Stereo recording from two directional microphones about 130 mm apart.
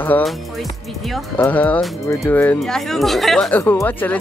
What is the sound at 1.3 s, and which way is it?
Speech, 15° left (ahead or behind).